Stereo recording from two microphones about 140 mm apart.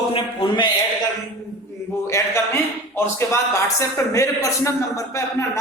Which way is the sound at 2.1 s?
20° left (ahead or behind).